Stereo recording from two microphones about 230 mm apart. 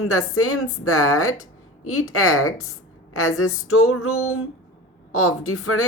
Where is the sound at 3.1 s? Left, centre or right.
Left.